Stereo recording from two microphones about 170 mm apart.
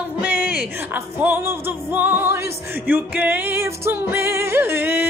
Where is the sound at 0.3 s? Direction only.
70° left (ahead or behind).